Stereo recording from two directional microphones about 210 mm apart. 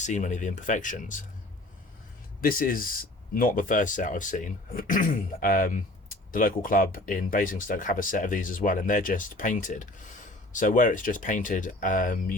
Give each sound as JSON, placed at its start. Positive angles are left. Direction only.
{"t": 0.0, "sound": "speech", "side_deg": 35}
{"t": 2.4, "sound": "speech", "side_deg": 40}